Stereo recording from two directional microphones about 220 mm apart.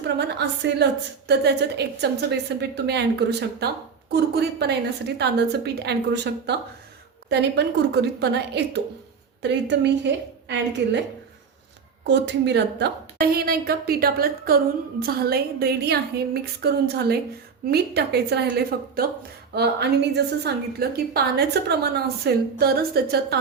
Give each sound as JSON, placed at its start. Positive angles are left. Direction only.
{"t": 0.2, "sound": "a woman's voice", "side_deg": -50}
{"t": 12.0, "sound": "a woman's voice", "side_deg": -50}